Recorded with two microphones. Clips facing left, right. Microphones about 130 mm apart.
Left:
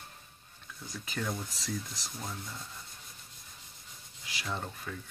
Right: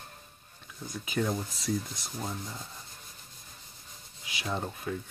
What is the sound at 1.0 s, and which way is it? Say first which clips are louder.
Speech: right 6 dB; 15° right (ahead or behind).